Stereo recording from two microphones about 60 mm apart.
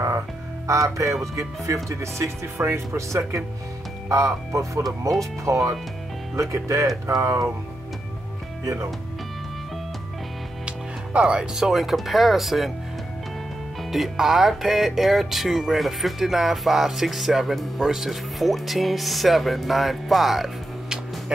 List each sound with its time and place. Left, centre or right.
0.7 s speech: right
11.1 s speech: centre
11.5 s speech: centre
13.8 s speech: centre